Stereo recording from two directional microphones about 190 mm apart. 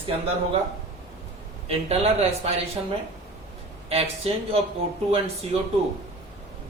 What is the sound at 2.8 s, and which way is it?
A woman's voice, 20° right (ahead or behind).